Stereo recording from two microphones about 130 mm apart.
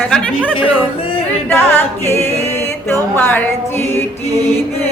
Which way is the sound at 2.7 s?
15° left (ahead or behind).